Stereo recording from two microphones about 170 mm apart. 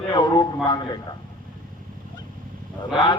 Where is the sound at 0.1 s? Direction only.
25° left (ahead or behind).